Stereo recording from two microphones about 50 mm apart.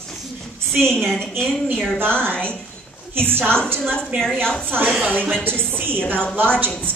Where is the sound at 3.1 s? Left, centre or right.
Right.